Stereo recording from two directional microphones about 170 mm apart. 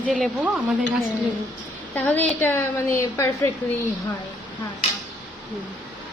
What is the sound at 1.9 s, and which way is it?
A woman's voice, 10° left (ahead or behind).